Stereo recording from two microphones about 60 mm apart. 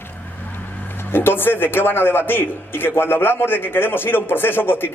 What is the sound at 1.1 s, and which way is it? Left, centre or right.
A man's voice, left.